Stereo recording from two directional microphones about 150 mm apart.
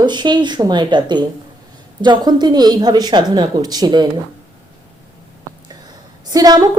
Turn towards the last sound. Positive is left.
turn(degrees=-25)  # may be behind; listen again after turning